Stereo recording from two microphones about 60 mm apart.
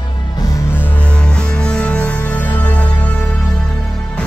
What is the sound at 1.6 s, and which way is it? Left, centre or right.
Music, centre.